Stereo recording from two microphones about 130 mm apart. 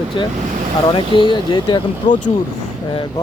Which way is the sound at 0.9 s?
40° left (ahead or behind).